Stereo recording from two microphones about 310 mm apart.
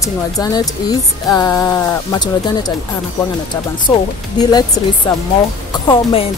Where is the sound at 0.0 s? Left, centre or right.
Centre.